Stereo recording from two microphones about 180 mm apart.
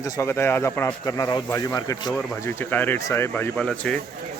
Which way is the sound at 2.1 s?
10° left (ahead or behind).